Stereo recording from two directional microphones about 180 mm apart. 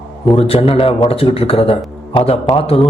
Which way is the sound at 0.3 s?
35° left (ahead or behind).